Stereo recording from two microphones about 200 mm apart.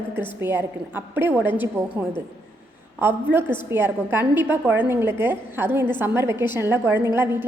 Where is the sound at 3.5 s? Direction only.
10° right (ahead or behind).